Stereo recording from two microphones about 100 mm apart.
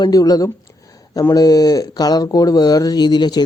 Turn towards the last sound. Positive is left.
turn(degrees=45)  # may be behind; listen again after turning